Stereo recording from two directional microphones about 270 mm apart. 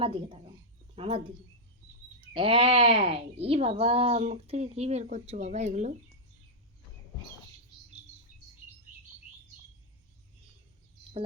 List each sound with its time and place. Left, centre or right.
0.0 s speech: centre
2.3 s speech: centre